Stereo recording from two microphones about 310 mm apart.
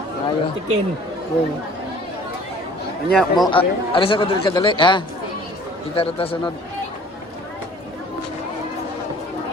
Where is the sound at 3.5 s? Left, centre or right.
Centre.